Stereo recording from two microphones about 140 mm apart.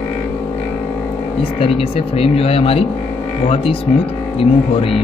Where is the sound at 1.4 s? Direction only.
40° left (ahead or behind).